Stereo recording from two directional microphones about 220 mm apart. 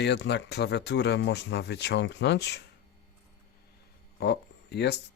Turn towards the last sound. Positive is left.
turn(degrees=50)  # may be behind; listen again after turning